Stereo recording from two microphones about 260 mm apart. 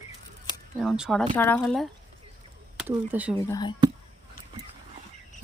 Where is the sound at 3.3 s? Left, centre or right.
Centre.